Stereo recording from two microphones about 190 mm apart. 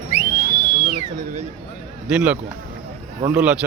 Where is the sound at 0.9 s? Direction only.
40° right (ahead or behind).